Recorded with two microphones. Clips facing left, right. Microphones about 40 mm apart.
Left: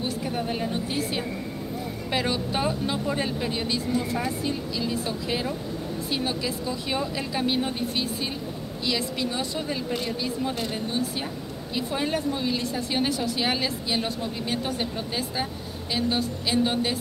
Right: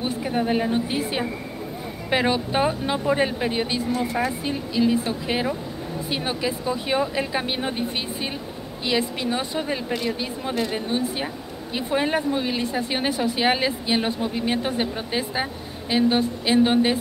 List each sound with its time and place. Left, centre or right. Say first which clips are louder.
0.0 s speech: right 4 dB; right